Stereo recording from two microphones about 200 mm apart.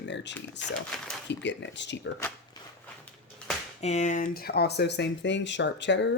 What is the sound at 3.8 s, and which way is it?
Speech, 35° left (ahead or behind).